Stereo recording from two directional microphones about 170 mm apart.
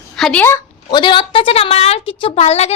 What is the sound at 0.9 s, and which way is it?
A woman's voice, 30° left (ahead or behind).